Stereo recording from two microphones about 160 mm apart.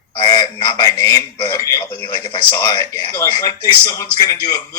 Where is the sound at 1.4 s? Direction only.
20° left (ahead or behind).